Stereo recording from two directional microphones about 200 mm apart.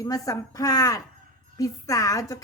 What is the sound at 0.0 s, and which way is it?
A woman's voice, 15° left (ahead or behind).